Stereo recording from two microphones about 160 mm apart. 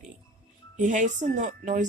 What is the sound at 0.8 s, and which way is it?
A woman's voice, 50° right (ahead or behind).